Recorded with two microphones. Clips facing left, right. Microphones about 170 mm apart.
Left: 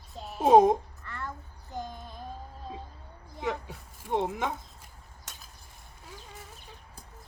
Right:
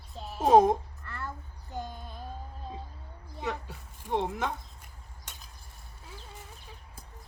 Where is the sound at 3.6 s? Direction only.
10° left (ahead or behind).